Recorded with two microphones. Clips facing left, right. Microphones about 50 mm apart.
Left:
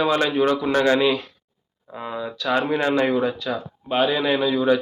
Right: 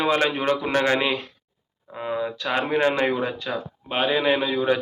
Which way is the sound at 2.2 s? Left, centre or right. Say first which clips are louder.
Left 5 dB; right.